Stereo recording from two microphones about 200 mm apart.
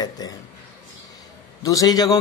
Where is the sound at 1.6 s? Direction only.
15° left (ahead or behind).